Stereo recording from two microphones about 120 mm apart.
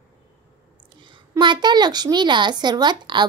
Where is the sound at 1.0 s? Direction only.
40° right (ahead or behind).